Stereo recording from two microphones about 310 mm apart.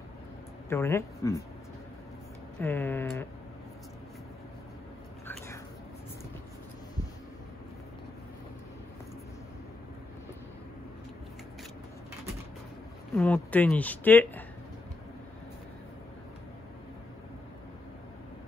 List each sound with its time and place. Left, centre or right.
0.7 s speech: centre
2.6 s speech: centre
13.1 s speech: centre